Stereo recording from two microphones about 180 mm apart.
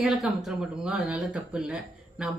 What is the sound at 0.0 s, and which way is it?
Speech, centre (ahead or behind).